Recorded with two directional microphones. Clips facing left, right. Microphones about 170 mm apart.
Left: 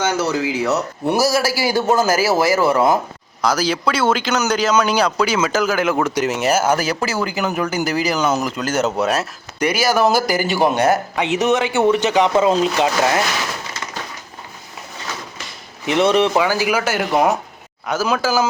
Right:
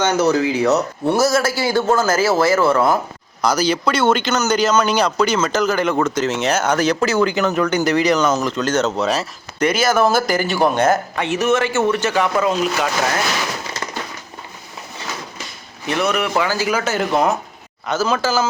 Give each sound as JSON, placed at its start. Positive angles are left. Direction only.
{"t": 0.0, "sound": "speech", "side_deg": 5}
{"t": 3.4, "sound": "speech", "side_deg": 0}
{"t": 15.9, "sound": "speech", "side_deg": 25}
{"t": 16.4, "sound": "speech", "side_deg": 15}